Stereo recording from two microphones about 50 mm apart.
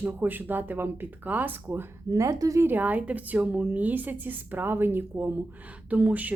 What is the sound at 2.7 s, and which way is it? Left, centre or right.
A woman's voice, right.